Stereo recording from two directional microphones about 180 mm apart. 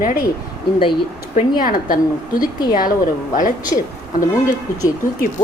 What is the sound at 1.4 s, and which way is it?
A woman's voice, 50° left (ahead or behind).